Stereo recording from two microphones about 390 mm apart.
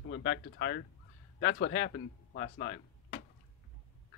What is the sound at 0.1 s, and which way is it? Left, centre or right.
Speech, left.